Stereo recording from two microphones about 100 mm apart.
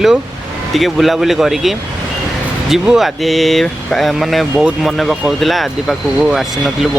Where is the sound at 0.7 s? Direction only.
Centre (ahead or behind).